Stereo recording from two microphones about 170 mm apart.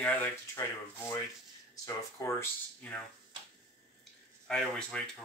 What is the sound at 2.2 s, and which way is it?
Speech, 20° left (ahead or behind).